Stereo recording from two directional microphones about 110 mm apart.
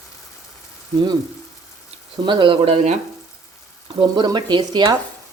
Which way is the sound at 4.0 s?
45° right (ahead or behind).